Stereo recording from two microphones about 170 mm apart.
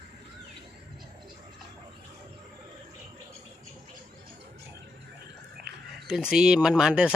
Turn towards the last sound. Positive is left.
turn(degrees=-5)  # may be behind; listen again after turning